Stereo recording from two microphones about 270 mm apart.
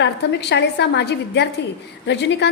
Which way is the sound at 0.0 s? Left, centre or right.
Left.